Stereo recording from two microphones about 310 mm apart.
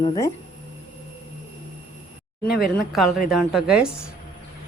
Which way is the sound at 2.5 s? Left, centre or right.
Left.